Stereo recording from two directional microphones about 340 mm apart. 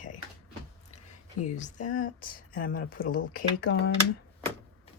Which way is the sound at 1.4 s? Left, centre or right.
Left.